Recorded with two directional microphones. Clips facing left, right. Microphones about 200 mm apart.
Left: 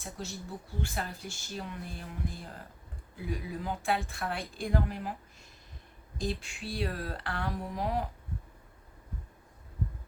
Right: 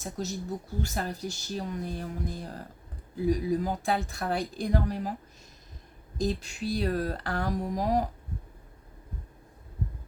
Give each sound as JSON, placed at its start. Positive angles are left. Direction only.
{"t": 0.0, "sound": "a woman's voice", "side_deg": -40}
{"t": 6.1, "sound": "a woman's voice", "side_deg": -40}